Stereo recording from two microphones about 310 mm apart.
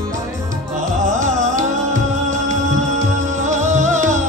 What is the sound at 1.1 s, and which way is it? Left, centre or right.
Music, right.